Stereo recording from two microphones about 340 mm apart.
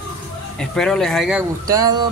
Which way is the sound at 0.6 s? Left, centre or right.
Centre.